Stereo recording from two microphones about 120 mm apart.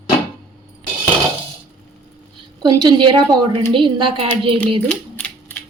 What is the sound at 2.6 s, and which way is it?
A woman's voice, 35° right (ahead or behind).